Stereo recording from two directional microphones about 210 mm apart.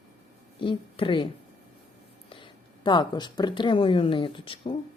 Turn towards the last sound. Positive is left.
turn(degrees=25)  # may be behind; listen again after turning